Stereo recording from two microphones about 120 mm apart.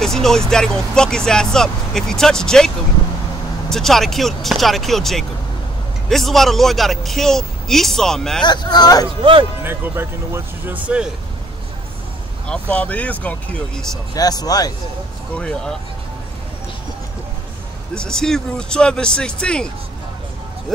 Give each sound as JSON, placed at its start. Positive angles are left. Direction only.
{"t": 0.0, "sound": "speech", "side_deg": 5}
{"t": 8.5, "sound": "speech", "side_deg": 35}
{"t": 9.2, "sound": "speech", "side_deg": -45}
{"t": 9.6, "sound": "speech", "side_deg": -20}
{"t": 12.4, "sound": "speech", "side_deg": 10}
{"t": 14.1, "sound": "speech", "side_deg": 30}
{"t": 15.3, "sound": "speech", "side_deg": 10}
{"t": 17.9, "sound": "speech", "side_deg": 5}